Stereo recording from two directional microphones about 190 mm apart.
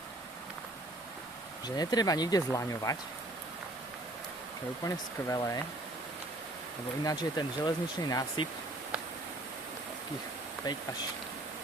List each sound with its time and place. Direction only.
1.6 s speech: 20° left (ahead or behind)
4.9 s speech: 15° left (ahead or behind)
7.0 s speech: 20° left (ahead or behind)